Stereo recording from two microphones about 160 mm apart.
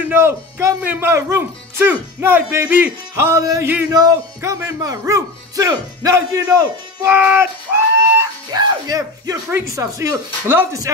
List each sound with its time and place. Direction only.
0.0 s speech: 15° right (ahead or behind)
7.2 s speech: 10° right (ahead or behind)
8.2 s speech: 25° right (ahead or behind)